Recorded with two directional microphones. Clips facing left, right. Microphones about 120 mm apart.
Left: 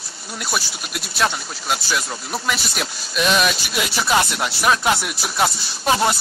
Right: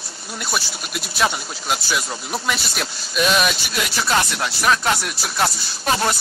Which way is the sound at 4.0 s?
15° left (ahead or behind).